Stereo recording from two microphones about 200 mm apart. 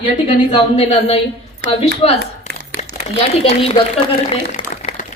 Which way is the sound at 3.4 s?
30° left (ahead or behind).